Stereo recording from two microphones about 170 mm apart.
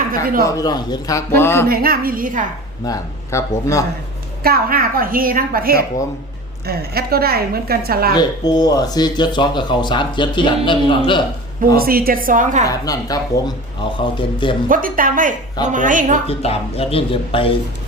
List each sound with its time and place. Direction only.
0.4 s speech: 20° left (ahead or behind)
1.6 s a woman's voice: 60° right (ahead or behind)
2.8 s speech: 20° left (ahead or behind)
4.4 s a woman's voice: 60° right (ahead or behind)
8.1 s speech: 25° left (ahead or behind)
11.8 s a woman's voice: 60° right (ahead or behind)
12.6 s speech: 20° left (ahead or behind)
14.7 s a woman's voice: 55° right (ahead or behind)
16.2 s speech: 35° left (ahead or behind)